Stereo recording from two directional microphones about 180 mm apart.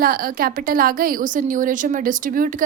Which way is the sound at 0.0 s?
55° right (ahead or behind).